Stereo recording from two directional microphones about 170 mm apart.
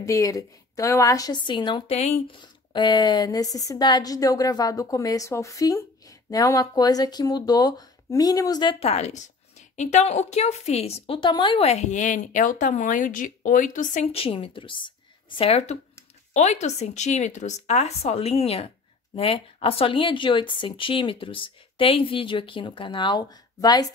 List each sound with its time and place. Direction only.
0.0 s a woman's voice: 20° left (ahead or behind); by 2.1 s 35° left (ahead or behind)
2.4 s a woman's voice: 25° left (ahead or behind)